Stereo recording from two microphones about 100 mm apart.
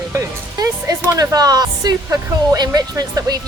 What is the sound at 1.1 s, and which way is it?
Speech, 35° right (ahead or behind).